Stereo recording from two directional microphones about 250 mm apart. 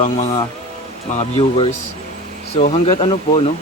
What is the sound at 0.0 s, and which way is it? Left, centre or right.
Speech, left.